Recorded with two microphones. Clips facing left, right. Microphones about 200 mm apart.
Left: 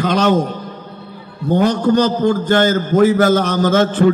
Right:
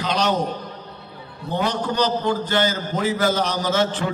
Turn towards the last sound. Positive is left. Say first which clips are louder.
# left 8 dB
turn(degrees=50)  # may be behind; listen again after turning